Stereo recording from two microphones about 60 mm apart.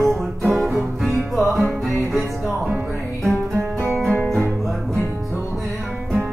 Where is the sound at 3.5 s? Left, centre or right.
Right.